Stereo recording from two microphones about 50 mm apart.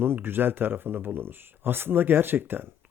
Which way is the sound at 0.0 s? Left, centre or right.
Right.